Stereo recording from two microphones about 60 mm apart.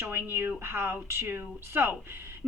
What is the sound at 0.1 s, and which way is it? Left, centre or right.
A woman's voice, right.